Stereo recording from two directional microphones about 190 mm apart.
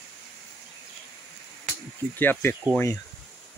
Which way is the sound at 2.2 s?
10° left (ahead or behind).